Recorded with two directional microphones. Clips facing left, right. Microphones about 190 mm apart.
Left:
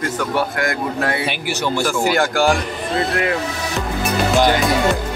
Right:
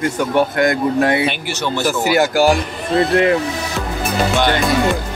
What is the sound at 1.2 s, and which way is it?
Speech, 10° left (ahead or behind).